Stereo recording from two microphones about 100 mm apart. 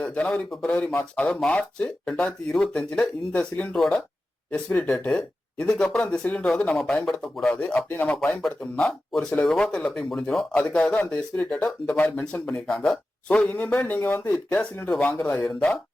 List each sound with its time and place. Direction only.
0.0 s speech: 10° left (ahead or behind)